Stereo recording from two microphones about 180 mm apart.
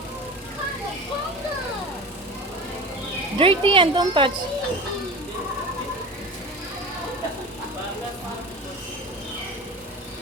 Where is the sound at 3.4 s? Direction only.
30° right (ahead or behind).